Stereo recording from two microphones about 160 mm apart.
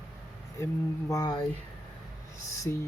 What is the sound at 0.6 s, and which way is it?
Speech, 20° left (ahead or behind).